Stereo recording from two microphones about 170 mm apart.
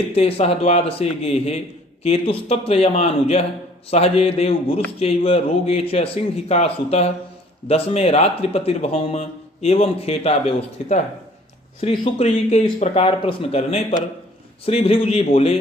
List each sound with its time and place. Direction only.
0.1 s a man's voice: 35° left (ahead or behind)